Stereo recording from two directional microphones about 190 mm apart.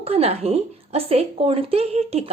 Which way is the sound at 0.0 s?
30° right (ahead or behind).